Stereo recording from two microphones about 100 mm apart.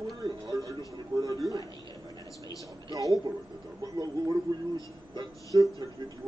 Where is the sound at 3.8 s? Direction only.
40° right (ahead or behind).